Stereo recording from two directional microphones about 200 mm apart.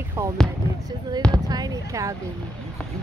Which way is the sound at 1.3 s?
20° right (ahead or behind).